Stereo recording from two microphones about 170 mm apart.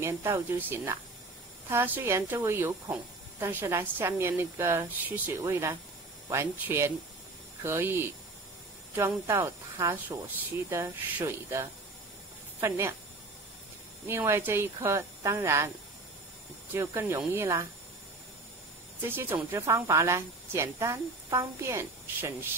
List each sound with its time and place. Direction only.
0.0 s a woman's voice: 15° right (ahead or behind)
14.0 s a woman's voice: 15° right (ahead or behind)
16.7 s a woman's voice: 15° right (ahead or behind)
19.0 s a woman's voice: 10° right (ahead or behind)